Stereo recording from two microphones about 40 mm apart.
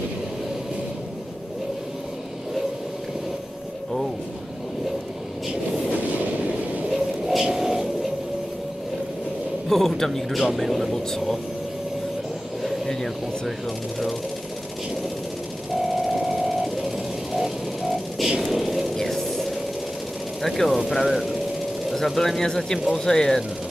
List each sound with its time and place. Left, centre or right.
6.9 s music: centre
7.5 s a sound: centre
9.7 s speech: centre
12.6 s a sound: centre
15.8 s music: centre
17.3 s a sound: centre
18.4 s speech: centre
18.9 s music: centre
20.4 s speech: centre